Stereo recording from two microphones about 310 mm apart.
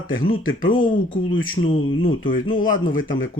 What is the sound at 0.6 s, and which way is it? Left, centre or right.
Speech, left.